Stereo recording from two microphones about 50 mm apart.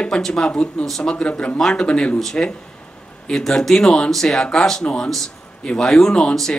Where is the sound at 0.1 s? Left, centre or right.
Centre.